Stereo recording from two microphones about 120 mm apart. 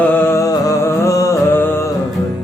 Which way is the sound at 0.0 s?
15° left (ahead or behind).